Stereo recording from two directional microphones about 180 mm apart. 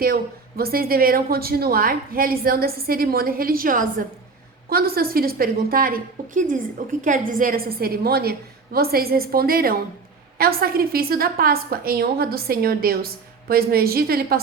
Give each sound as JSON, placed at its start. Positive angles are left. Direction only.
{"t": 0.0, "sound": "a woman's voice", "side_deg": -55}